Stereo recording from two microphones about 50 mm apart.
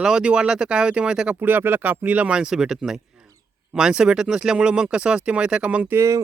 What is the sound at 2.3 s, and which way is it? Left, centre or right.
Speech, centre.